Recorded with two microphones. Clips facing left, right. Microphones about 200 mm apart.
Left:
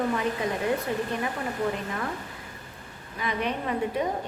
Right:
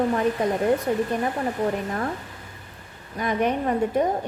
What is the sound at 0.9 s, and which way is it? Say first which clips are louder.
Speech: right 6 dB; 45° right (ahead or behind).